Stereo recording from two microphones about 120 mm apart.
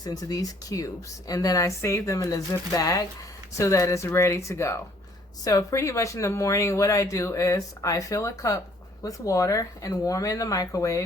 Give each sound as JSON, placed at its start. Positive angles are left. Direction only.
{"t": 0.0, "sound": "speech", "side_deg": 30}